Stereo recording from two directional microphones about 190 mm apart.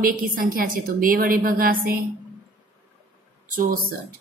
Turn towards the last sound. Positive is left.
turn(degrees=-50)  # may be behind; listen again after turning